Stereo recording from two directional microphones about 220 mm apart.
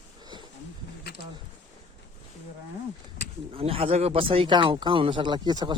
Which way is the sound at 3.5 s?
25° right (ahead or behind).